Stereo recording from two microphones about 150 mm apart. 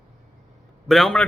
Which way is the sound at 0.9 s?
Centre (ahead or behind).